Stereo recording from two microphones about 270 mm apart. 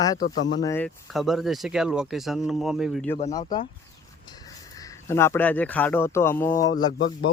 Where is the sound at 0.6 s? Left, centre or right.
Centre.